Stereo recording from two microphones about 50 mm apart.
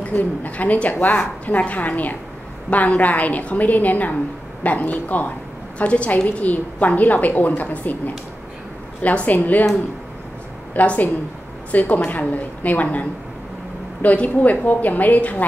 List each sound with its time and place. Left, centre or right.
0.1 s a woman's voice: left
9.0 s a woman's voice: left
10.7 s a woman's voice: left
14.0 s a woman's voice: left